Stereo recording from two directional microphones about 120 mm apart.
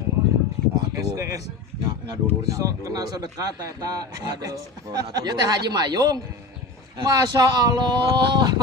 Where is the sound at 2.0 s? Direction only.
30° right (ahead or behind).